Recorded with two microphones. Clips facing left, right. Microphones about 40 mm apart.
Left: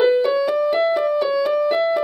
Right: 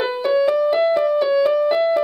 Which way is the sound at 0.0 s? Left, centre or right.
Centre.